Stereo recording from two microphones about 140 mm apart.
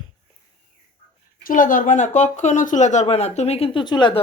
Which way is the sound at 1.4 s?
75° left (ahead or behind).